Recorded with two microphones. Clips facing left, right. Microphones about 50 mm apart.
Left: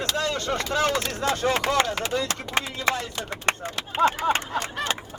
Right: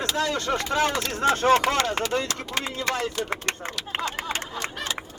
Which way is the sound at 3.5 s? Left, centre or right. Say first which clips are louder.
Left 5 dB; left.